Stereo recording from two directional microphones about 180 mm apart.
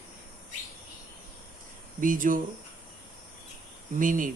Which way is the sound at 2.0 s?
50° right (ahead or behind).